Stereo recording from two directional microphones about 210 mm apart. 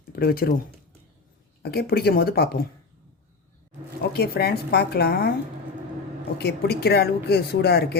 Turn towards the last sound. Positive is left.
turn(degrees=50)  # may be behind; listen again after turning